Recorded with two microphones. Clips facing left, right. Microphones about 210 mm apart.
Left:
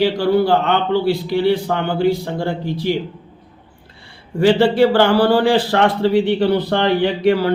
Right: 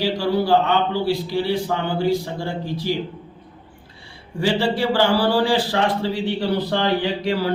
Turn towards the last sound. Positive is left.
turn(degrees=60)  # may be behind; listen again after turning